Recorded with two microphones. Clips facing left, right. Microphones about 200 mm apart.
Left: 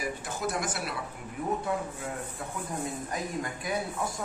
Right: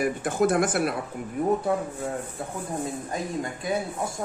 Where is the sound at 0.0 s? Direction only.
55° right (ahead or behind).